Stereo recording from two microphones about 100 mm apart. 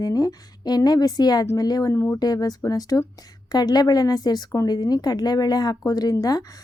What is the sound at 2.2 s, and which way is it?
A woman's voice, 40° left (ahead or behind).